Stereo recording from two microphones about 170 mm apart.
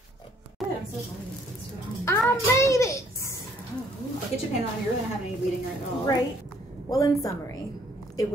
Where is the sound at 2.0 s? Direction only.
15° left (ahead or behind).